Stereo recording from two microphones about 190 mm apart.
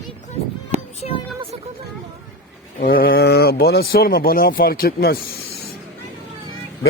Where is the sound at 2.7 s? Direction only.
50° left (ahead or behind).